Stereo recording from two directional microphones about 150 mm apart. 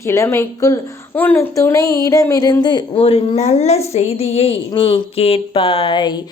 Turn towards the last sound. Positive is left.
turn(degrees=30)  # may be behind; listen again after turning